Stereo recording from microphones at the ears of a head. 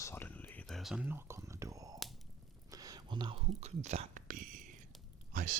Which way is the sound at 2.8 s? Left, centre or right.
Right.